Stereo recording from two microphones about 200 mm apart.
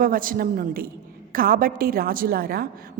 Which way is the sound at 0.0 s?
45° right (ahead or behind).